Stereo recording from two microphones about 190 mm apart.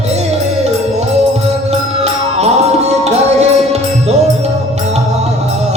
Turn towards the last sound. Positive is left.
turn(degrees=-35)  # may be behind; listen again after turning